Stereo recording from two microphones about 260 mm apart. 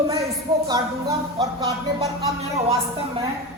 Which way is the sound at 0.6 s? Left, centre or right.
Centre.